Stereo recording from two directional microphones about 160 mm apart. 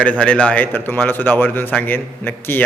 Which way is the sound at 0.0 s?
10° left (ahead or behind).